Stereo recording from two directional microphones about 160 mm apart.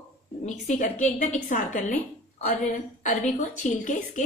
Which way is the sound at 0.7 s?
50° left (ahead or behind).